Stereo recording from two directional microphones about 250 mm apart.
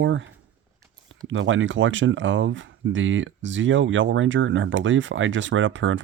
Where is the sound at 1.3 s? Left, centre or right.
Right.